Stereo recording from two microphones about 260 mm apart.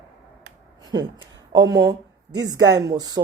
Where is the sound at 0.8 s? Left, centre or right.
Centre.